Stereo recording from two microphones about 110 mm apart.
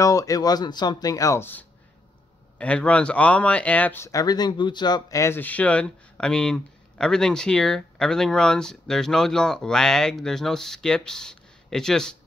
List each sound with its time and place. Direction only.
0.0 s speech: 30° left (ahead or behind); by 4.0 s 15° left (ahead or behind)
4.0 s speech: 30° left (ahead or behind)
5.2 s speech: 20° left (ahead or behind)